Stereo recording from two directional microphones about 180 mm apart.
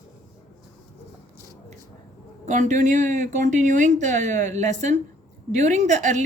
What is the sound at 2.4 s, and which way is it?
Speech, 40° right (ahead or behind).